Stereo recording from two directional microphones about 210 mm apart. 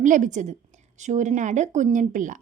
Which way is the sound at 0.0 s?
35° right (ahead or behind).